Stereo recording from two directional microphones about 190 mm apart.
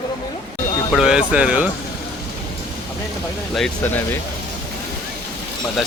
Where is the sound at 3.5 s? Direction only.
5° left (ahead or behind).